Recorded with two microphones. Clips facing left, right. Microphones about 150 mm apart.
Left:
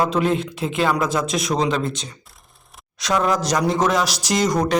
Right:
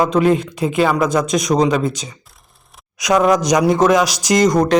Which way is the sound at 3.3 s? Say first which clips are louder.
Right 6 dB; 15° right (ahead or behind).